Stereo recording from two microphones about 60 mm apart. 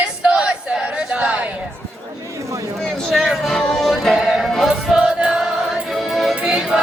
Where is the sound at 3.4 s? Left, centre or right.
Centre.